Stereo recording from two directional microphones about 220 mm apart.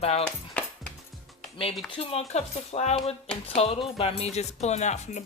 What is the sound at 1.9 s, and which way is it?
Speech, 25° left (ahead or behind).